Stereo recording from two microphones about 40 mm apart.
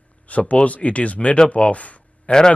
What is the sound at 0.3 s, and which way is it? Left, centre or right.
Speech, left.